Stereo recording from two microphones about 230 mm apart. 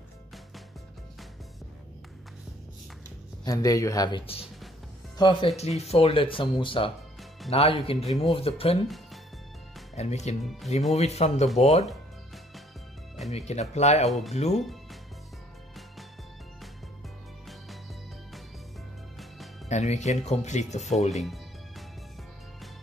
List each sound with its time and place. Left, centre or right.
3.4 s speech: centre
8.8 s music: centre
9.9 s speech: left
13.3 s speech: left
14.5 s speech: centre
19.7 s speech: left
21.1 s music: centre